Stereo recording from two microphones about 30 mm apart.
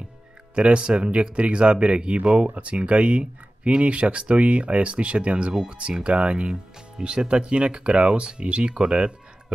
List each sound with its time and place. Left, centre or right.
0.6 s speech: right
6.5 s speech: right